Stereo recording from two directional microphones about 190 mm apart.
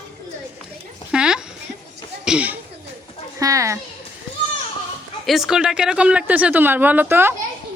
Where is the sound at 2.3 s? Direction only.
5° right (ahead or behind).